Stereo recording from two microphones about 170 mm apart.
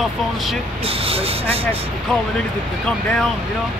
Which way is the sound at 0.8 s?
35° right (ahead or behind).